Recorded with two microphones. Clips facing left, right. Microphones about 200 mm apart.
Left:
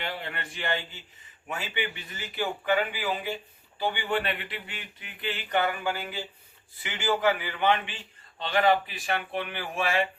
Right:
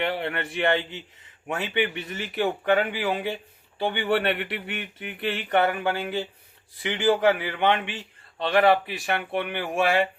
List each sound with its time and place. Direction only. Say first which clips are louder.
0.0 s speech: right 8 dB; 65° right (ahead or behind)